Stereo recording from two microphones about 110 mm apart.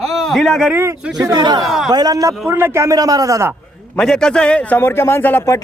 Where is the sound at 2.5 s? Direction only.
20° right (ahead or behind).